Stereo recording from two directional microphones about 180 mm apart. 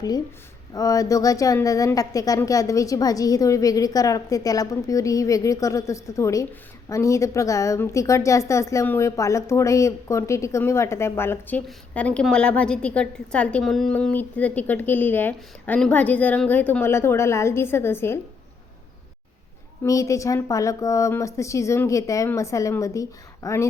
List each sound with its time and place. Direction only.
0.7 s a woman's voice: 20° left (ahead or behind)
19.8 s a woman's voice: 15° left (ahead or behind)